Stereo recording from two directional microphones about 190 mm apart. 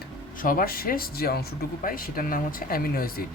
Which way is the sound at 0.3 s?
45° left (ahead or behind).